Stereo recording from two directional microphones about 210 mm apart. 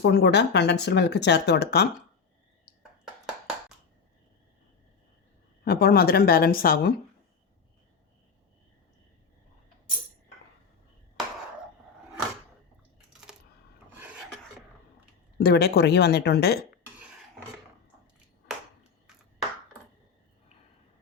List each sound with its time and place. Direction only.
0.0 s speech: 55° left (ahead or behind)
5.6 s speech: 50° left (ahead or behind)
13.9 s filing: 10° right (ahead or behind)
15.4 s speech: 50° left (ahead or behind)
18.4 s a sound: 5° right (ahead or behind)